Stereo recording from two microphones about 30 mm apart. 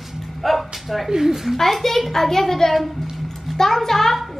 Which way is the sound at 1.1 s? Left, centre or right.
Centre.